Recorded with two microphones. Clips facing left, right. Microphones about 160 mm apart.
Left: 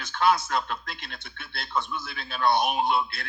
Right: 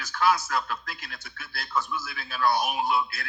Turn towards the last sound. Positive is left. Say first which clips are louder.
# left 1 dB
turn(degrees=25)  # may be behind; listen again after turning